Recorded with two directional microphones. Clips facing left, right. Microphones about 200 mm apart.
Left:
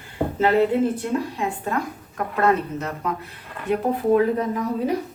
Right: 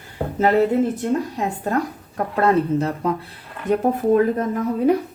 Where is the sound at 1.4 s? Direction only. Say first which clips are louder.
Right 3 dB; 40° right (ahead or behind).